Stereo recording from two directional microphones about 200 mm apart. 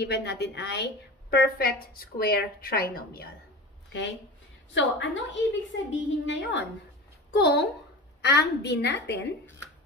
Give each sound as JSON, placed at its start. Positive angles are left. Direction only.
{"t": 0.0, "sound": "a woman's voice", "side_deg": 55}
{"t": 4.7, "sound": "a woman's voice", "side_deg": 65}